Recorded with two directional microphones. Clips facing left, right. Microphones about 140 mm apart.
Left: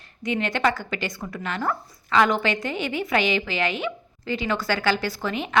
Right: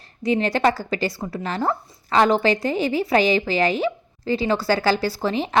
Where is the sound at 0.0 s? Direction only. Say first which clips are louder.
Right 5 dB; 35° right (ahead or behind).